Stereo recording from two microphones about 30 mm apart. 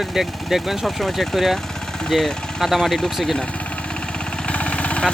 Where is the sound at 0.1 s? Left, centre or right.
Centre.